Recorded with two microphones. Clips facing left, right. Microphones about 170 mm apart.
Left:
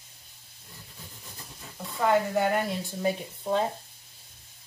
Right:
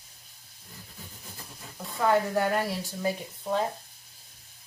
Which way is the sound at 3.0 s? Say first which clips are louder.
Left 3 dB; 25° left (ahead or behind).